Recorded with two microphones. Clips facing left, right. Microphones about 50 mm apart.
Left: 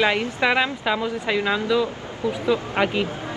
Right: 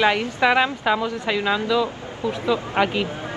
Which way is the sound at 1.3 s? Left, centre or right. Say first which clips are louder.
Even; left.